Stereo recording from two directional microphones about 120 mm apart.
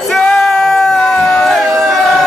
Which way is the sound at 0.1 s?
5° left (ahead or behind).